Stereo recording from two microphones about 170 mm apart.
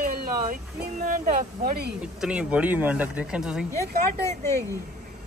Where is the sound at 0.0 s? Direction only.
55° right (ahead or behind).